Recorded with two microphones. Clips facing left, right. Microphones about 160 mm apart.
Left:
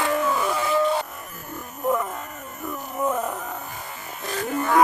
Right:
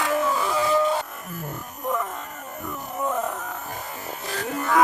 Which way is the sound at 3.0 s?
5° left (ahead or behind).